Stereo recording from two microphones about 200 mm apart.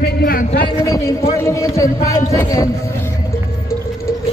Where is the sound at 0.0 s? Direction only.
50° left (ahead or behind).